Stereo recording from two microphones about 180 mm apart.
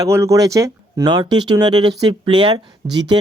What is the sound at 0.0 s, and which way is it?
Speech, 15° right (ahead or behind).